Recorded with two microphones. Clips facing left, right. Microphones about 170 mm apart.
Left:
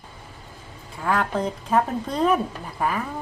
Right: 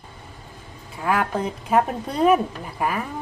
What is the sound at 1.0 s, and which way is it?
A woman's voice, 10° right (ahead or behind).